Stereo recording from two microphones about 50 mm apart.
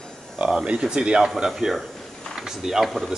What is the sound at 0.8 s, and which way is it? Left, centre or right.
Speech, centre.